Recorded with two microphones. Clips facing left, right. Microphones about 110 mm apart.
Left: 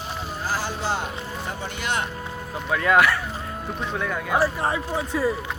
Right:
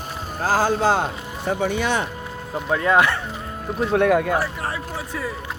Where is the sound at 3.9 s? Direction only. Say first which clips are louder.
Right 13 dB; 70° right (ahead or behind).